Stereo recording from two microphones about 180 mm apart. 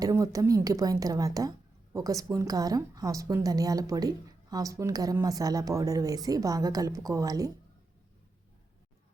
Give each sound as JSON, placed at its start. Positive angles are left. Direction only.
{"t": 0.0, "sound": "speech", "side_deg": -20}